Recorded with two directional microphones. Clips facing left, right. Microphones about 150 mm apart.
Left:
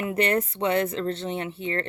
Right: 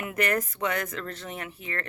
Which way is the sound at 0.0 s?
30° left (ahead or behind).